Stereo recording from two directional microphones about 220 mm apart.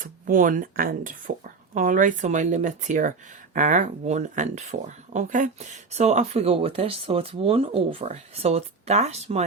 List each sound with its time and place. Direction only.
0.0 s speech: 35° right (ahead or behind)